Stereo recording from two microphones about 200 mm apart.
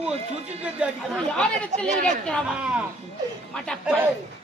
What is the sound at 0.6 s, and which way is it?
Speech, 5° right (ahead or behind).